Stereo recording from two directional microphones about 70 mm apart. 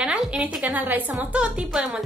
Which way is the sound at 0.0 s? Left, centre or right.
Centre.